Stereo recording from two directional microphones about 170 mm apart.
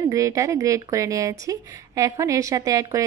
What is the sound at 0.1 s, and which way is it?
Speech, 20° right (ahead or behind).